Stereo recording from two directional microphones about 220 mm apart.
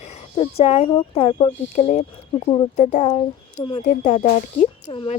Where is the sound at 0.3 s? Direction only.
25° left (ahead or behind).